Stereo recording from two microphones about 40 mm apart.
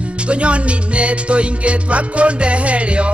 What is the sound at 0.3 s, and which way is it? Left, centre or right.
Music, right.